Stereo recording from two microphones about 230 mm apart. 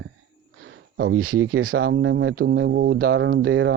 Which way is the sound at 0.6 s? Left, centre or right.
Right.